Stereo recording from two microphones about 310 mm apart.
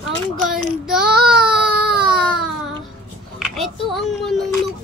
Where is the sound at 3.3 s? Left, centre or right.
Centre.